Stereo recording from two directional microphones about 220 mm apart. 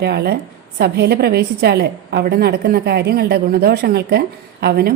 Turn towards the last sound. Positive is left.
turn(degrees=-45)  # may be behind; listen again after turning